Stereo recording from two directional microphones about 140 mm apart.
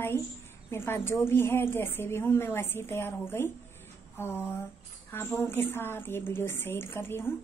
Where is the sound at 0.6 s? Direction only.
15° left (ahead or behind).